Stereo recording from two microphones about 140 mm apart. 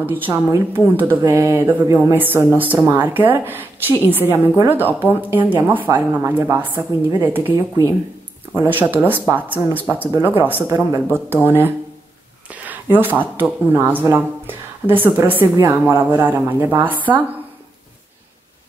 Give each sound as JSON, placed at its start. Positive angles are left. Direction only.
{"t": 0.0, "sound": "speech", "side_deg": -15}
{"t": 8.5, "sound": "speech", "side_deg": -15}
{"t": 12.9, "sound": "speech", "side_deg": -15}